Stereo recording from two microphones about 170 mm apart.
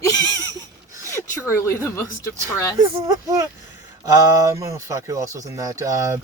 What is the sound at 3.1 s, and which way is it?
Speech, 20° right (ahead or behind).